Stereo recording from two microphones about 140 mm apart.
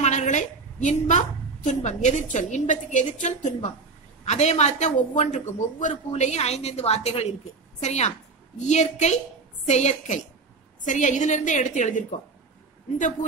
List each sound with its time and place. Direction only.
0.0 s a woman's voice: 55° left (ahead or behind)